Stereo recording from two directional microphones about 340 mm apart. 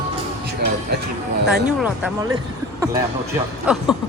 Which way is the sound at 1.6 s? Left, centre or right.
Centre.